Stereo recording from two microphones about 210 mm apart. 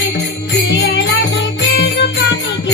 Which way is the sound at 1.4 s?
55° left (ahead or behind).